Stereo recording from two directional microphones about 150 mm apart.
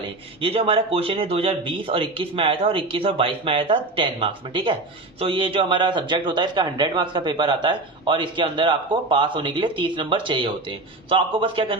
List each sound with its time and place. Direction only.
0.4 s a man's voice: 40° right (ahead or behind)